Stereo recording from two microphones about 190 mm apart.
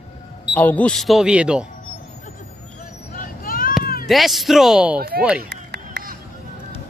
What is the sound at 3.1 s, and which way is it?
Vehicle, 45° left (ahead or behind).